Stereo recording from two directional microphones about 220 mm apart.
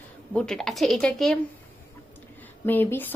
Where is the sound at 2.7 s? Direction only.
10° left (ahead or behind).